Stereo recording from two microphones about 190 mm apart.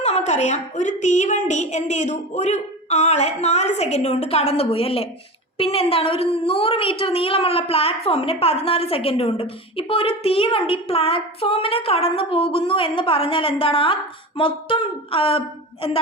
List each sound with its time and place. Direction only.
0.0 s a woman's voice: 35° left (ahead or behind)